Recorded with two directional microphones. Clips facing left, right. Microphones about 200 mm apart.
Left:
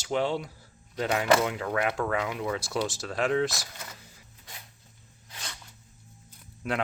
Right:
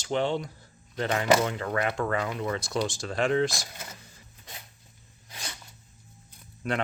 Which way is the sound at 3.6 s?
25° right (ahead or behind).